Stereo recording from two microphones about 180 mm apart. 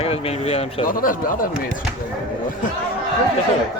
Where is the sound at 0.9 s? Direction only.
50° left (ahead or behind).